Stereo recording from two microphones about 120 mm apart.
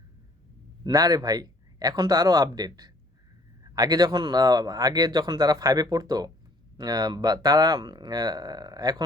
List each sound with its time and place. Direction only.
0.9 s speech: 30° right (ahead or behind)